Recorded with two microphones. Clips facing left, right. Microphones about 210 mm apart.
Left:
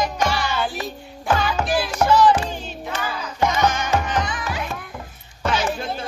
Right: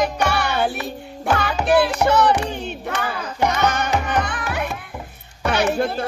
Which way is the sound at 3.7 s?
60° right (ahead or behind).